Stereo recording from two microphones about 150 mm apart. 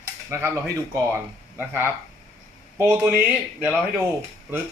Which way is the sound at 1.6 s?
15° right (ahead or behind).